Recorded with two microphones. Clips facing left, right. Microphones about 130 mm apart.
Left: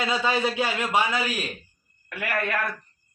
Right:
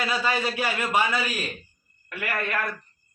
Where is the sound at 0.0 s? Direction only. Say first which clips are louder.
Left 2 dB; 20° left (ahead or behind).